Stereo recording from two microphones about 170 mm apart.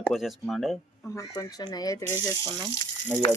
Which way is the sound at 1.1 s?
20° left (ahead or behind).